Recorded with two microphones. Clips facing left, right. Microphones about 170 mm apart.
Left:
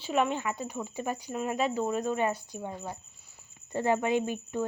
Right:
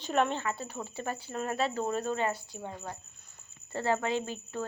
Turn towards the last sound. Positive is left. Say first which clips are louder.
# left 5 dB
turn(degrees=15)  # may be behind; listen again after turning